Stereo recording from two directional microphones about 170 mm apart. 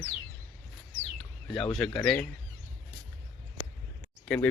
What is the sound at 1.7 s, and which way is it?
Speech, centre (ahead or behind).